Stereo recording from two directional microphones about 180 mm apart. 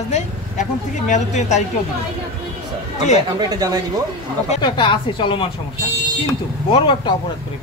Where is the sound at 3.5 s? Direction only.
20° right (ahead or behind).